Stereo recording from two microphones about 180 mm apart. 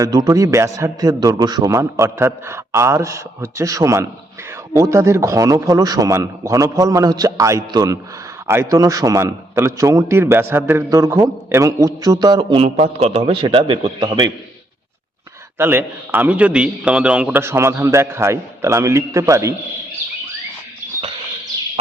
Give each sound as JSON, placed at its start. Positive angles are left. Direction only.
{"t": 0.0, "sound": "a man's voice", "side_deg": -20}
{"t": 15.5, "sound": "a man's voice", "side_deg": -10}